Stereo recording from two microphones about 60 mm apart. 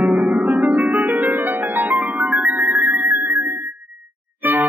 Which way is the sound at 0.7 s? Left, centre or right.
Right.